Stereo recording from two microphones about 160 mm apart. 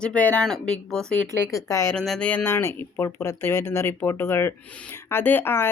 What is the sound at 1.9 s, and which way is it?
Speech, 5° left (ahead or behind).